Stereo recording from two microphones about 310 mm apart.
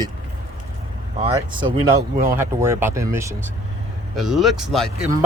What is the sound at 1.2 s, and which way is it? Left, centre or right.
Speech, centre.